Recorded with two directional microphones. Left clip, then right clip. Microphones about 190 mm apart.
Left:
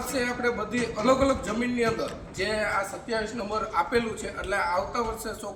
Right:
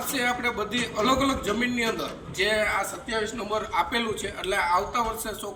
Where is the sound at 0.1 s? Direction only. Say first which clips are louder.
Right 1 dB; 20° left (ahead or behind).